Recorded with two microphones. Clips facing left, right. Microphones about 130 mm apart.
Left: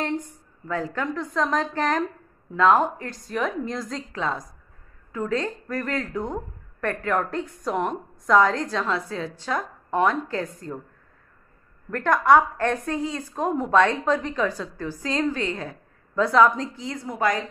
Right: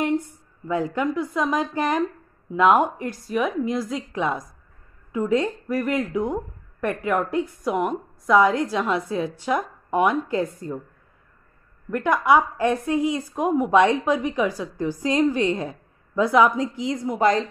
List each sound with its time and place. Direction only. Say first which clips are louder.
0.7 s speech: right 4 dB; 15° right (ahead or behind)
11.9 s speech: left 1 dB; 10° right (ahead or behind); by 17.5 s 25° right (ahead or behind)